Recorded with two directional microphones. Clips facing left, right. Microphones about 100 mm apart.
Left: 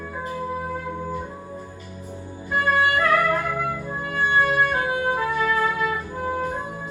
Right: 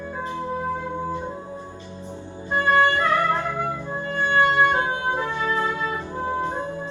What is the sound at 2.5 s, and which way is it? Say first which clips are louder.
Music: right 2 dB; 25° right (ahead or behind).